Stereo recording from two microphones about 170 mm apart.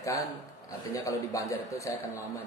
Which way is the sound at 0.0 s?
20° left (ahead or behind).